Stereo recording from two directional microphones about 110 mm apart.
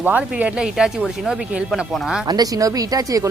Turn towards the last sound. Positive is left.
turn(degrees=-35)  # may be behind; listen again after turning